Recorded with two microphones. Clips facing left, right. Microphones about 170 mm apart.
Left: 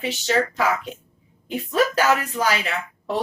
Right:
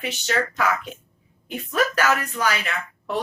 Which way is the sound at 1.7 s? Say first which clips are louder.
Left 2 dB; 30° left (ahead or behind).